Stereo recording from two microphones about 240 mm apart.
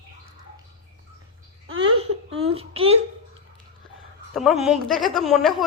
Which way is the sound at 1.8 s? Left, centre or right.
Right.